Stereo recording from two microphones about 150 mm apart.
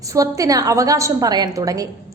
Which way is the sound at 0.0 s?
20° right (ahead or behind).